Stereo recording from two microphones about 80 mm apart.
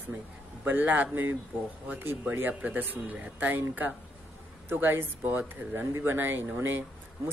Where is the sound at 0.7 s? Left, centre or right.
Right.